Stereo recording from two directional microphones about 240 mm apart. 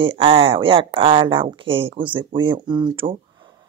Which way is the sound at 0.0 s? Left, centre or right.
Right.